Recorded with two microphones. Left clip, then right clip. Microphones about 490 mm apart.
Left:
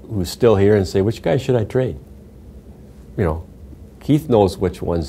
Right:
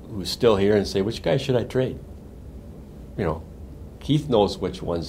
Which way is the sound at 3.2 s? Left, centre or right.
Left.